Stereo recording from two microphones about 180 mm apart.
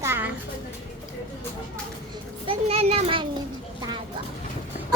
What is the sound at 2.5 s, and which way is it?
Children playing, 35° right (ahead or behind).